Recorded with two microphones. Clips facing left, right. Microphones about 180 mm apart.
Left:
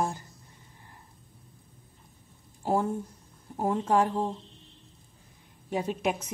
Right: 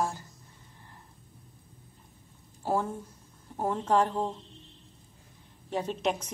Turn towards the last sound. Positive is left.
turn(degrees=10)  # may be behind; listen again after turning